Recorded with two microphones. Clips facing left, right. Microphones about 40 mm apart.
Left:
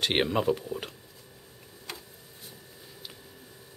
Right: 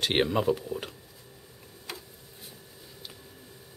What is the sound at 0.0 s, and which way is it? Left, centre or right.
Speech, centre.